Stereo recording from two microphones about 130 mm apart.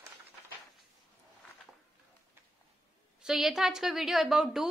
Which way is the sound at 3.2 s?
5° right (ahead or behind).